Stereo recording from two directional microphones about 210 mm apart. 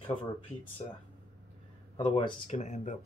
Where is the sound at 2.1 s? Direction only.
25° left (ahead or behind).